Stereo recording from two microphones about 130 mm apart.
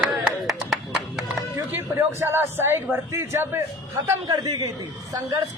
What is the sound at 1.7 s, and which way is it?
A man's voice, 15° right (ahead or behind).